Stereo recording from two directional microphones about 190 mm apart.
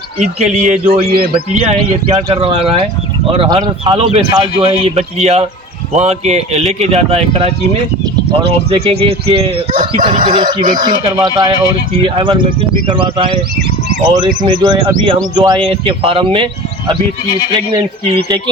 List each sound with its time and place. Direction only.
0.5 s a man's voice: 40° right (ahead or behind)
10.1 s speech: 45° right (ahead or behind)
10.4 s speech: 25° right (ahead or behind)